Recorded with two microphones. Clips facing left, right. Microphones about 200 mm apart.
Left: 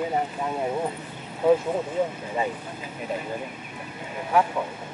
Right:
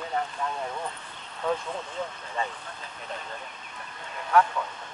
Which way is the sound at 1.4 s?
10° left (ahead or behind).